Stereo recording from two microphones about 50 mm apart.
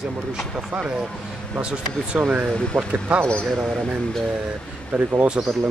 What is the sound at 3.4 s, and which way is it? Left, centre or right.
Speech, centre.